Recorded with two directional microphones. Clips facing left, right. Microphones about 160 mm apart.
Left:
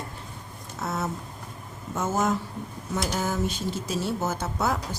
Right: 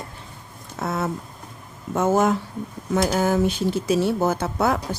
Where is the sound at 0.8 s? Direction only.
55° right (ahead or behind).